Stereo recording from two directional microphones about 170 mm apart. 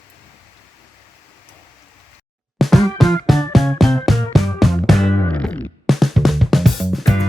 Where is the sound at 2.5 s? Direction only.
Centre (ahead or behind).